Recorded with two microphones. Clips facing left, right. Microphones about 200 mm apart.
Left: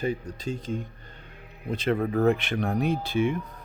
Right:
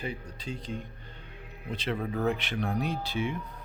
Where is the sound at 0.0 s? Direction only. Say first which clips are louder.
Left 8 dB; 45° left (ahead or behind).